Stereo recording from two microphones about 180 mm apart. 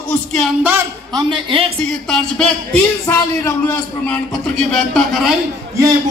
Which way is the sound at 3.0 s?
15° left (ahead or behind).